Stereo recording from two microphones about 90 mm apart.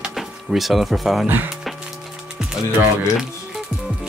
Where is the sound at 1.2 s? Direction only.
20° right (ahead or behind).